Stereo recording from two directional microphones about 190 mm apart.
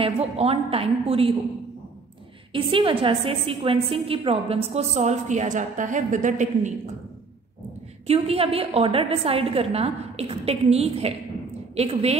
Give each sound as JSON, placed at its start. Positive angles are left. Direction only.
{"t": 0.0, "sound": "a woman's voice", "side_deg": -30}
{"t": 2.5, "sound": "a woman's voice", "side_deg": -25}
{"t": 8.1, "sound": "a woman's voice", "side_deg": -30}